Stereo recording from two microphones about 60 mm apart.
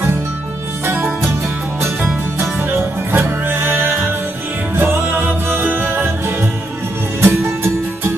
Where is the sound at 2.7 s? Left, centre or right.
Right.